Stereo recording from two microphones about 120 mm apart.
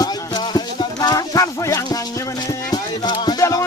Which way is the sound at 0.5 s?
35° left (ahead or behind).